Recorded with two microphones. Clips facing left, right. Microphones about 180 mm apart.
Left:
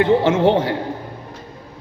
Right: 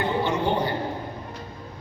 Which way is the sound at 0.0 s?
90° left.